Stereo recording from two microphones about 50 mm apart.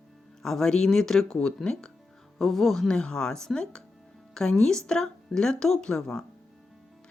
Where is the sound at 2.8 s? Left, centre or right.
Centre.